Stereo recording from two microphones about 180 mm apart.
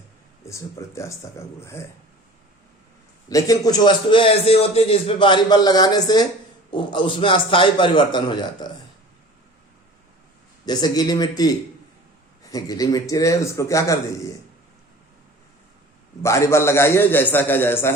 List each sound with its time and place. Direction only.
0.4 s a man's voice: 15° left (ahead or behind)
3.2 s a man's voice: 20° left (ahead or behind)
10.7 s a man's voice: 20° left (ahead or behind)
16.2 s a man's voice: 15° left (ahead or behind)